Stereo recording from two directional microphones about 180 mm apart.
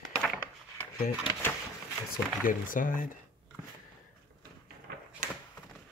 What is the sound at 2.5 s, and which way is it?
Speech, 50° left (ahead or behind).